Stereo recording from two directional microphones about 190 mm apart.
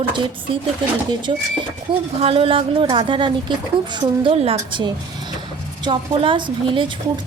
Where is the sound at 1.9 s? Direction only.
30° right (ahead or behind).